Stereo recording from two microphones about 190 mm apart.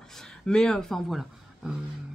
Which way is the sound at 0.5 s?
5° left (ahead or behind).